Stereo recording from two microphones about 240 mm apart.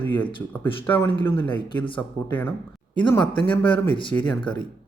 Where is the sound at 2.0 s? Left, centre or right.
Centre.